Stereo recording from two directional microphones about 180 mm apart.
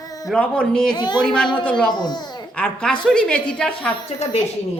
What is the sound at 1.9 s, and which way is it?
Speech, 25° left (ahead or behind).